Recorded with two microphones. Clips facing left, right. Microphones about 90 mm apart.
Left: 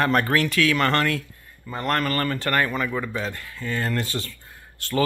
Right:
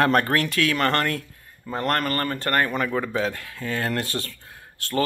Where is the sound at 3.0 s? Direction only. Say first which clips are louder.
Right 3 dB; 70° right (ahead or behind); by 4.3 s 55° right (ahead or behind).